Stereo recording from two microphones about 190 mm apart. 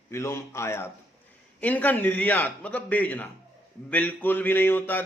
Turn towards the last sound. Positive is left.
turn(degrees=10)  # may be behind; listen again after turning